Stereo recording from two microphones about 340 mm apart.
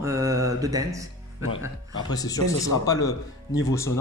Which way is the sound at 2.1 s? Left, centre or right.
Centre.